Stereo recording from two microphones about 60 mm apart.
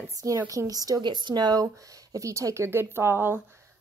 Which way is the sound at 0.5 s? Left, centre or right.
Right.